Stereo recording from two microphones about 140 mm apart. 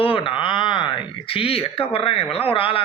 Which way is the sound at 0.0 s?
40° left (ahead or behind).